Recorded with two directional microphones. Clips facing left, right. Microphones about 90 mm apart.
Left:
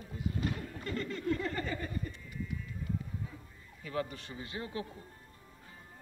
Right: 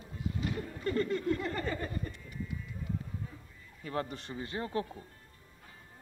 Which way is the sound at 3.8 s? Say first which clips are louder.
Right 1 dB; 35° right (ahead or behind).